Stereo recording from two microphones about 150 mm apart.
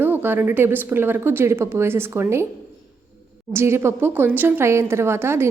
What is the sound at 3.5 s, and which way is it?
A woman's voice, 15° right (ahead or behind).